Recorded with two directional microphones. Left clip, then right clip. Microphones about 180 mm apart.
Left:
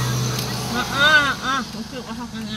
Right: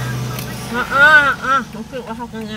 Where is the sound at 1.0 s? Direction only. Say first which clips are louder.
Right 6 dB; 35° right (ahead or behind).